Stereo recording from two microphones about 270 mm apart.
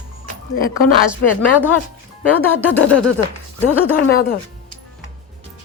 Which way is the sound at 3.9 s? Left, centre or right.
Left.